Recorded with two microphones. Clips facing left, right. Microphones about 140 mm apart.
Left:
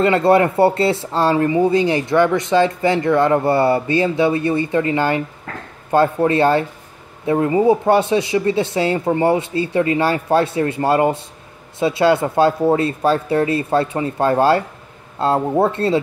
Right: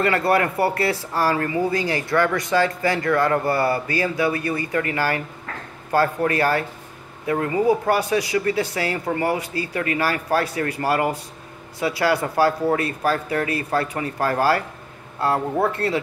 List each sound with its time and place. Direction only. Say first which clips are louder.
0.0 s speech: left 6 dB; 25° left (ahead or behind)